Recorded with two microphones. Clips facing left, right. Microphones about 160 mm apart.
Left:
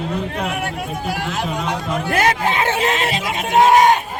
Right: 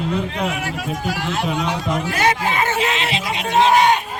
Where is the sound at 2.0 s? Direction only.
55° left (ahead or behind).